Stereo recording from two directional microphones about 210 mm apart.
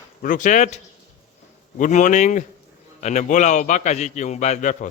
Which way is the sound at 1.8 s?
35° left (ahead or behind).